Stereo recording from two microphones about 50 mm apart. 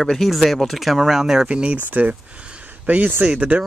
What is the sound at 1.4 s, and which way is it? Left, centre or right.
Speech, right.